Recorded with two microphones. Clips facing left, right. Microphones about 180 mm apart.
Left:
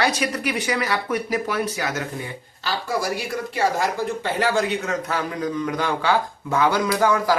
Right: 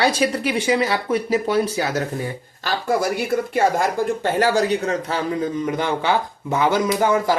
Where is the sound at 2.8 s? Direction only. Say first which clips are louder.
Right 6 dB; 55° right (ahead or behind).